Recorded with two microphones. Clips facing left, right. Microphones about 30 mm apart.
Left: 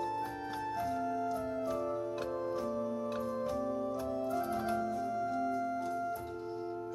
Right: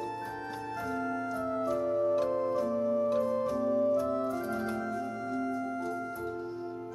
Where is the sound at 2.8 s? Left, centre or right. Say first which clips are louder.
Right 8 dB; centre.